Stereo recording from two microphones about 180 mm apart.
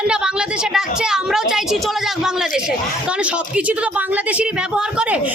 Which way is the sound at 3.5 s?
5° right (ahead or behind).